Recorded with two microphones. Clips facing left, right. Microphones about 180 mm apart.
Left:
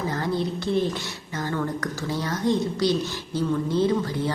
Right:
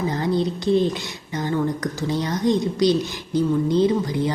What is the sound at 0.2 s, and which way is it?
A woman's voice, 20° right (ahead or behind).